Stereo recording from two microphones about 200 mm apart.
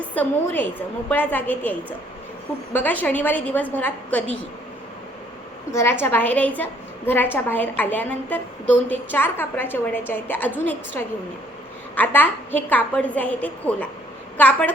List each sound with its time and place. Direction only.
0.1 s a woman's voice: 10° left (ahead or behind)
2.7 s a woman's voice: 10° left (ahead or behind)
5.7 s a woman's voice: 10° left (ahead or behind)